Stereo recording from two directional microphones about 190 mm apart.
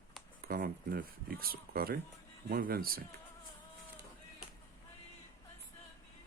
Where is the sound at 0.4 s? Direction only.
50° right (ahead or behind).